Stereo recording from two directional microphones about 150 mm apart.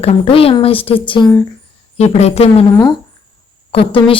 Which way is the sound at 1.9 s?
45° left (ahead or behind).